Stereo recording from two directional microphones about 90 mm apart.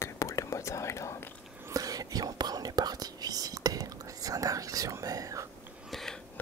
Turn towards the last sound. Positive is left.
turn(degrees=5)  # may be behind; listen again after turning